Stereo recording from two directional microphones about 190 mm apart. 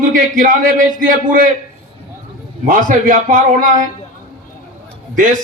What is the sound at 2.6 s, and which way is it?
A man's voice, 45° right (ahead or behind).